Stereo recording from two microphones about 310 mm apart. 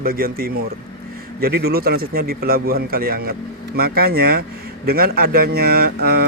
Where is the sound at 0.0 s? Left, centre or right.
Right.